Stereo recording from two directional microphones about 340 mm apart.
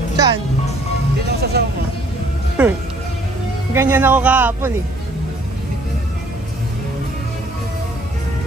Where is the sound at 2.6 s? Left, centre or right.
Centre.